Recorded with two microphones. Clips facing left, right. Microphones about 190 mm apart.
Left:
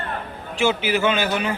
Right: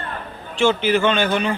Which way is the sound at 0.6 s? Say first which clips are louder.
Right 3 dB; 10° left (ahead or behind).